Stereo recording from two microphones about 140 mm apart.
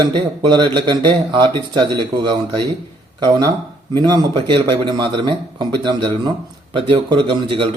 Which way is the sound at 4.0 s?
30° right (ahead or behind).